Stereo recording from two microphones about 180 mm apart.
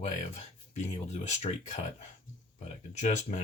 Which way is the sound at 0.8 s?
40° left (ahead or behind).